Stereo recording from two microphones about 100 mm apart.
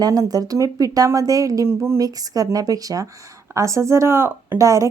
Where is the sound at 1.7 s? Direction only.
25° right (ahead or behind).